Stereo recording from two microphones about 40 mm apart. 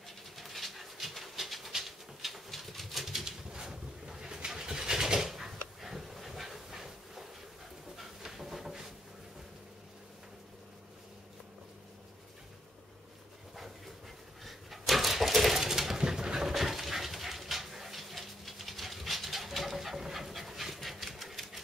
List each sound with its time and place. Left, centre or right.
0.4 s dog: centre
1.9 s pigeon: centre
3.3 s bird: centre
7.9 s a sound: centre
14.4 s a sound: centre
15.6 s dog: centre